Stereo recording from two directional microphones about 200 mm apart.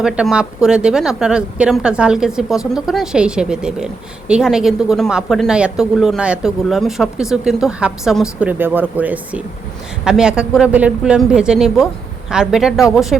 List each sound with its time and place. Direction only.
0.0 s a woman's voice: 5° right (ahead or behind)